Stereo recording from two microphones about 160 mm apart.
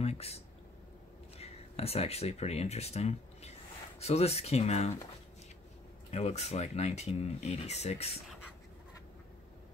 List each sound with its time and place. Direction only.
0.0 s a sound: 40° left (ahead or behind)
1.4 s speech: 40° left (ahead or behind)
6.1 s speech: 45° left (ahead or behind)